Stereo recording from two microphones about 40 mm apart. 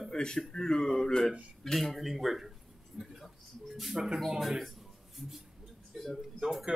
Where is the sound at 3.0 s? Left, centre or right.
Centre.